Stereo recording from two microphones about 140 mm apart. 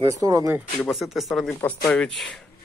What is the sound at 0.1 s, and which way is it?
Speech, 25° right (ahead or behind).